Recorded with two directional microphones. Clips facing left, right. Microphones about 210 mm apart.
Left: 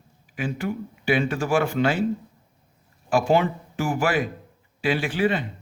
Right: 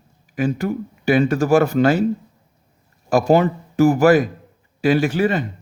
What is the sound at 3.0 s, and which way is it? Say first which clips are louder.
Speech: right 5 dB; 40° right (ahead or behind).